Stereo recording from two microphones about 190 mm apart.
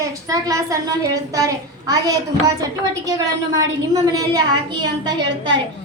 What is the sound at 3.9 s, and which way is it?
A woman's voice, 20° right (ahead or behind).